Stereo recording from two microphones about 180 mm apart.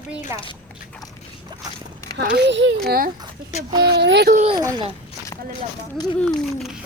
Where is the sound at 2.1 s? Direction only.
65° right (ahead or behind); by 2.7 s 90° right.